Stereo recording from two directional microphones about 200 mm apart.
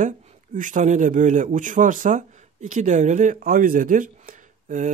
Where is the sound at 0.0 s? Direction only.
35° right (ahead or behind).